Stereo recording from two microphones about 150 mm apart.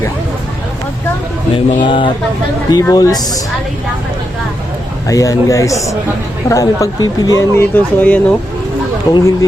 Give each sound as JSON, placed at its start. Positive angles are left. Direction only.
{"t": 1.8, "sound": "speech", "side_deg": 35}
{"t": 5.0, "sound": "speech", "side_deg": 20}
{"t": 9.0, "sound": "speech", "side_deg": 20}